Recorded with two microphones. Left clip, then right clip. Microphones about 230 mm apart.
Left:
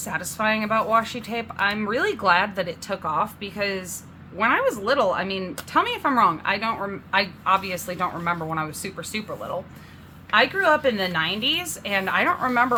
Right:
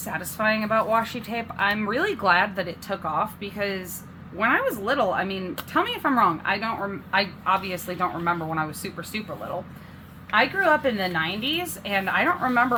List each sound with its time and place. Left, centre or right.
0.0 s speech: centre